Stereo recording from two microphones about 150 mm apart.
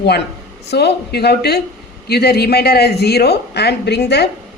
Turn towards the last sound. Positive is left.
turn(degrees=90)